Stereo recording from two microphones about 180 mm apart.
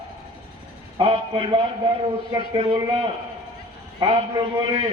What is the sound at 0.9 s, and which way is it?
A man's voice, 30° right (ahead or behind).